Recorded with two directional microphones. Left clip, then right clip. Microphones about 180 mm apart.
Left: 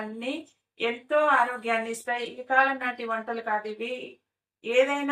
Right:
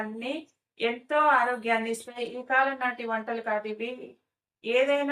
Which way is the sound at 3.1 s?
15° right (ahead or behind).